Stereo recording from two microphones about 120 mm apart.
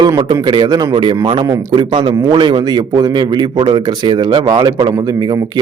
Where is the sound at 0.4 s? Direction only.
35° right (ahead or behind).